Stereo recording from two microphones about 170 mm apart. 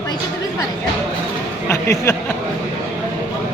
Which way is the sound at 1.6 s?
15° left (ahead or behind).